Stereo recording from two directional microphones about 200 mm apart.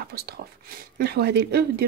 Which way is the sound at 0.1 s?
50° right (ahead or behind).